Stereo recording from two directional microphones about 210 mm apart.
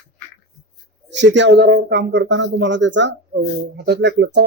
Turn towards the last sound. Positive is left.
turn(degrees=-55)  # may be behind; listen again after turning